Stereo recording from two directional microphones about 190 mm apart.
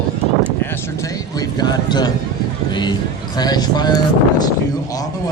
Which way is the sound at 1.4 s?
20° left (ahead or behind).